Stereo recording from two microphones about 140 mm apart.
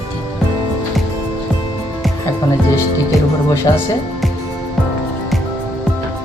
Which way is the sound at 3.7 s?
30° left (ahead or behind).